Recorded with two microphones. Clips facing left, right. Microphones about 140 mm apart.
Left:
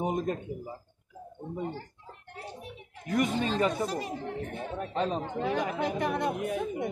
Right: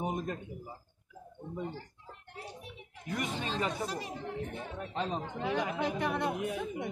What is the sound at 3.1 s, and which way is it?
Speech, 50° left (ahead or behind).